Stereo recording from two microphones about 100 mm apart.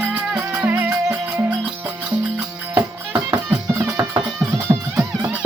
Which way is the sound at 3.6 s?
25° right (ahead or behind).